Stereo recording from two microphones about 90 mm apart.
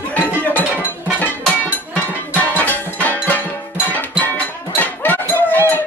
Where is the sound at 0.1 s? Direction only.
20° left (ahead or behind).